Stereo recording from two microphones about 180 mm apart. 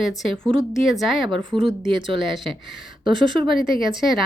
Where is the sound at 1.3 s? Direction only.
30° right (ahead or behind).